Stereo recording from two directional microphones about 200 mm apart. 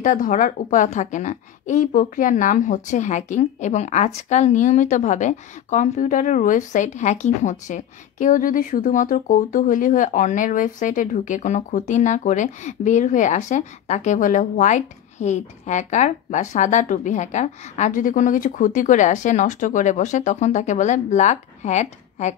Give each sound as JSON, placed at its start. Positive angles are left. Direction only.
{"t": 0.0, "sound": "a woman's voice", "side_deg": 40}